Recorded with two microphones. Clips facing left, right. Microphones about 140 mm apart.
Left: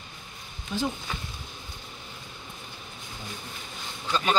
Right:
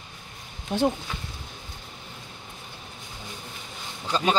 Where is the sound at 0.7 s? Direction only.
65° right (ahead or behind).